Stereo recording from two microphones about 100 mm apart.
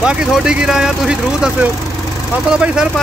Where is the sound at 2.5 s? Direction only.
10° right (ahead or behind).